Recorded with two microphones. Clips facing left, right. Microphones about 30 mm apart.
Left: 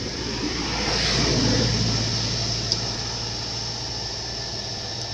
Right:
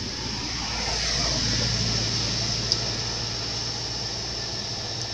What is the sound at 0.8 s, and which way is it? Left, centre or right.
Vehicle, left.